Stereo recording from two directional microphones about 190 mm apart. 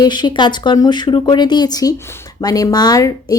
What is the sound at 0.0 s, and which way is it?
Speech, 25° left (ahead or behind).